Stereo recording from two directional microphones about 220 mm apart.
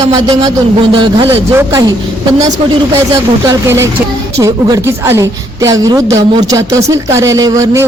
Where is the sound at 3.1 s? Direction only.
15° right (ahead or behind).